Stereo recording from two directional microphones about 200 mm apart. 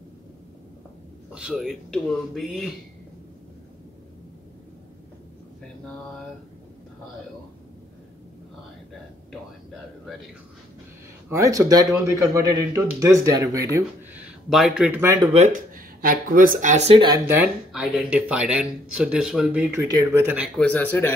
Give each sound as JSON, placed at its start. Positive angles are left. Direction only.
{"t": 1.3, "sound": "speech", "side_deg": -5}
{"t": 11.2, "sound": "speech", "side_deg": -15}
{"t": 15.5, "sound": "speech", "side_deg": -45}
{"t": 17.3, "sound": "speech", "side_deg": -5}
{"t": 20.5, "sound": "speech", "side_deg": 10}